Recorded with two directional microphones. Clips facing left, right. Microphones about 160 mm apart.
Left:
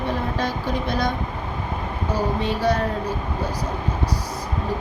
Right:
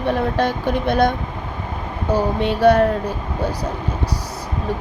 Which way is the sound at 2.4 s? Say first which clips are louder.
Right 10 dB; 65° right (ahead or behind).